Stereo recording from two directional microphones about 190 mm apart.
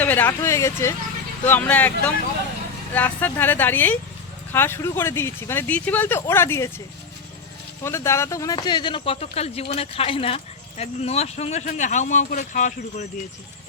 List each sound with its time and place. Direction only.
0.0 s speech: 10° left (ahead or behind)
7.9 s speech: 15° left (ahead or behind); by 13.1 s 40° left (ahead or behind)